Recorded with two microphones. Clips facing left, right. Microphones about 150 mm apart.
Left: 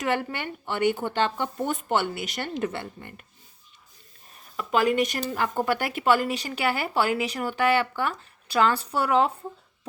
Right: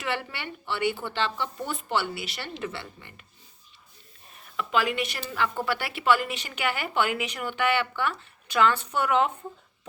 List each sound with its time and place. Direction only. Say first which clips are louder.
0.0 s speech: left 5 dB; 45° left (ahead or behind)
4.5 s a woman's voice: left 4 dB; 40° left (ahead or behind)